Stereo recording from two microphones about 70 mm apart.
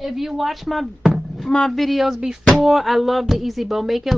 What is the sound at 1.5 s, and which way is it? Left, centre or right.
Speech, centre.